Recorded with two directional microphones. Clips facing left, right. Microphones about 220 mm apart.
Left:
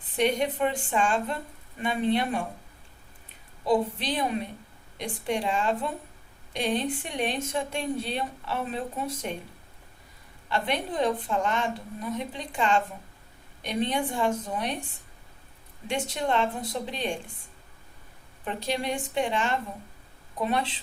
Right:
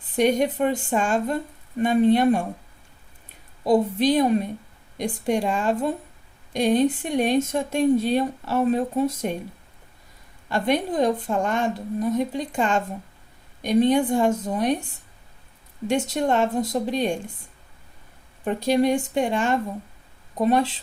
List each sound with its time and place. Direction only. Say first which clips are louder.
0.2 s a woman's voice: right 5 dB; 45° right (ahead or behind)
3.6 s a woman's voice: right 6 dB; 40° right (ahead or behind)
10.5 s a woman's voice: right 6 dB; 40° right (ahead or behind)
15.9 s a woman's voice: right 6 dB; 45° right (ahead or behind)
18.4 s a woman's voice: right 10 dB; 45° right (ahead or behind)